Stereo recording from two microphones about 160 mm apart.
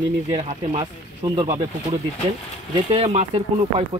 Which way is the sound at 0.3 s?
40° right (ahead or behind).